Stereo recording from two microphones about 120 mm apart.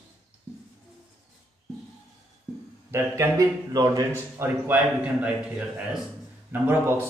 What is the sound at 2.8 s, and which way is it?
Speech, 25° right (ahead or behind).